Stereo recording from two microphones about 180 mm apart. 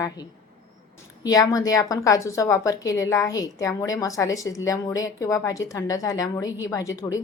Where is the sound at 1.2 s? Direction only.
20° left (ahead or behind).